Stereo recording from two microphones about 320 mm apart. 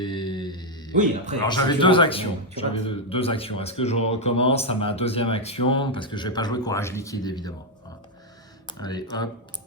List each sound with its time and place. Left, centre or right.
0.0 s a sound: centre
0.9 s speech: right
1.5 s speech: centre
8.8 s speech: centre